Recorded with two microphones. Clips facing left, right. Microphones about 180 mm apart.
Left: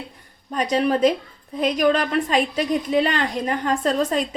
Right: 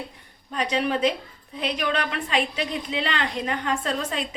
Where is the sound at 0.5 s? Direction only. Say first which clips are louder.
Left 5 dB; 45° left (ahead or behind).